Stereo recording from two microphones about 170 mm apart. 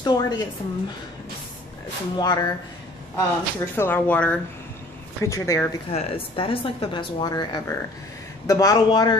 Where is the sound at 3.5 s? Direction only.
15° left (ahead or behind).